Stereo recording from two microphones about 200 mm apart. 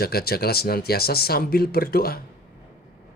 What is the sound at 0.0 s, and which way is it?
Speech, 50° left (ahead or behind).